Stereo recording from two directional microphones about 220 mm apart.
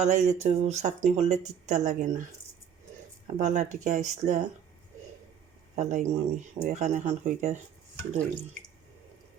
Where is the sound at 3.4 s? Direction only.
35° right (ahead or behind).